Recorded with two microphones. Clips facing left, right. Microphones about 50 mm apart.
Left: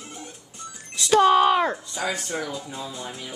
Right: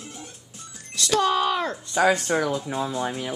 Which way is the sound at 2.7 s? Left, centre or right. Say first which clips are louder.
Right 8 dB; right.